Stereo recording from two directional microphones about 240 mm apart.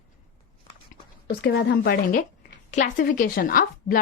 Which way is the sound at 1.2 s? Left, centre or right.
Left.